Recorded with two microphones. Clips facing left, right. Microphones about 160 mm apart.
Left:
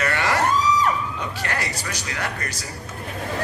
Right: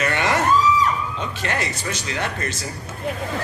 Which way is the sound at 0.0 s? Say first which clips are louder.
Right 1 dB; 20° right (ahead or behind).